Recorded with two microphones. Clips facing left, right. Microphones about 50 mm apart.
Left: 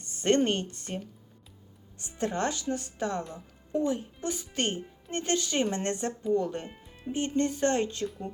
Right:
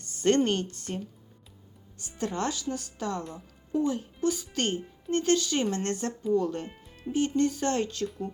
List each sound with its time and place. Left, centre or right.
0.0 s speech: left
2.0 s speech: left